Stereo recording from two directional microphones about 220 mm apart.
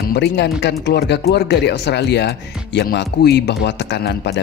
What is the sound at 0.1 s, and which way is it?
Speech, 50° left (ahead or behind).